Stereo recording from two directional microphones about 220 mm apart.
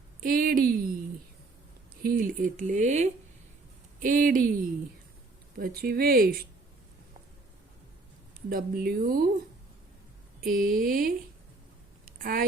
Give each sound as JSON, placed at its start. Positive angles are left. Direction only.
{"t": 0.2, "sound": "speech", "side_deg": -40}
{"t": 2.0, "sound": "speech", "side_deg": -40}
{"t": 5.5, "sound": "speech", "side_deg": -40}
{"t": 8.4, "sound": "speech", "side_deg": -40}
{"t": 10.4, "sound": "speech", "side_deg": -40}
{"t": 12.0, "sound": "a sound", "side_deg": -40}